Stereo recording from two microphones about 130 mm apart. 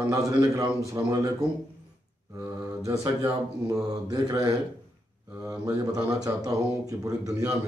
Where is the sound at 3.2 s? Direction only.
30° right (ahead or behind).